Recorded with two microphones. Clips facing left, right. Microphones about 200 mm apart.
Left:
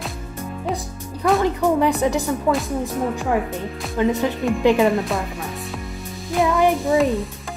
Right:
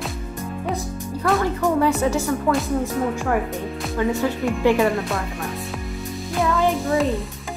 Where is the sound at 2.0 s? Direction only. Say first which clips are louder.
Left 1 dB; 15° left (ahead or behind).